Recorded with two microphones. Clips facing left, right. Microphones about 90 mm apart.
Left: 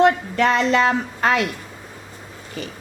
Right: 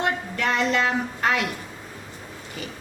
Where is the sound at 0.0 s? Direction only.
90° left.